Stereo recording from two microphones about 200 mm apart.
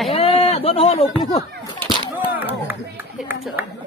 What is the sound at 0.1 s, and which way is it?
Chatter, 30° left (ahead or behind).